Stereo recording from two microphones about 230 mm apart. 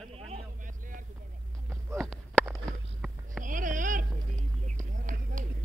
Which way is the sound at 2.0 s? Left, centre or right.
Centre.